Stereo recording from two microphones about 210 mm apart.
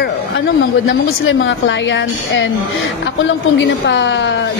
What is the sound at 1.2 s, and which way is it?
A woman's voice, 60° left (ahead or behind).